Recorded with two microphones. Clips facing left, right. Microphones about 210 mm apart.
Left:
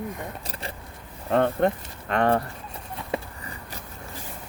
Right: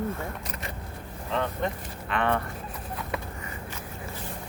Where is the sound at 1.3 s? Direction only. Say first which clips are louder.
Left 8 dB; 50° left (ahead or behind).